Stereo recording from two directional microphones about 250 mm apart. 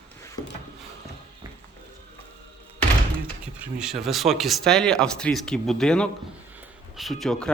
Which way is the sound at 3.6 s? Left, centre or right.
Centre.